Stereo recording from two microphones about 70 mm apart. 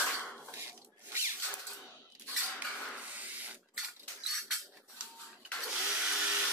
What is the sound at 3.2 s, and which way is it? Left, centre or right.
Printer, right.